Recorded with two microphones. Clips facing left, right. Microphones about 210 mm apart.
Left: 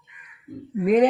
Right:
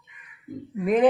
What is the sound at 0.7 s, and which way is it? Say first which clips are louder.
Speech: left 4 dB; 35° left (ahead or behind).